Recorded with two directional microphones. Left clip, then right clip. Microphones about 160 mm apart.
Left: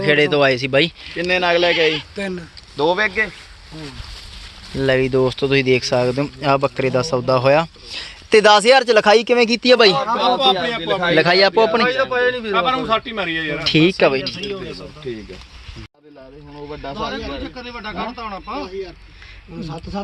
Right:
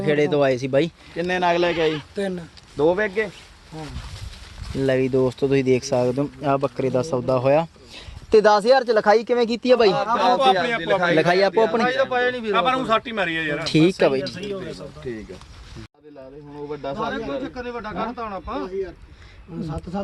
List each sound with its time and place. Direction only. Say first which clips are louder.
0.0 s speech: left 5 dB; 5° right (ahead or behind)
1.1 s speech: left 3 dB; 70° right (ahead or behind)
2.1 s speech: left 1 dB; 40° right (ahead or behind)
4.8 s speech: left 4 dB; centre (ahead or behind)
6.8 s speech: left 4 dB; centre (ahead or behind)
9.0 s speech: left 5 dB; 30° left (ahead or behind); by 9.9 s 15° left (ahead or behind)
10.2 s speech: left 1 dB; centre (ahead or behind)
12.1 s a man's voice: left 4 dB; 50° left (ahead or behind)
12.5 s speech: left 2 dB; centre (ahead or behind)
16.6 s speech: left 1 dB; 5° right (ahead or behind)